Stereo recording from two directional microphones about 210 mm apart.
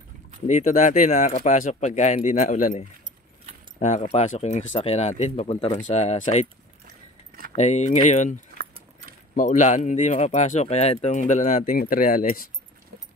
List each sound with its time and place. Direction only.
0.5 s speech: 35° left (ahead or behind)
3.8 s speech: 30° left (ahead or behind)
7.5 s speech: 35° left (ahead or behind)